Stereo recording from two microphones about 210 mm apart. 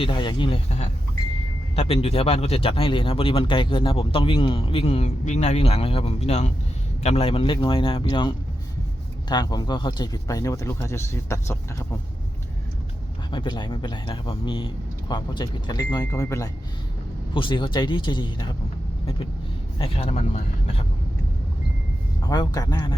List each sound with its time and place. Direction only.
0.0 s speech: 20° left (ahead or behind)
13.3 s speech: 20° left (ahead or behind)
19.8 s speech: 30° left (ahead or behind)
22.3 s speech: 20° left (ahead or behind)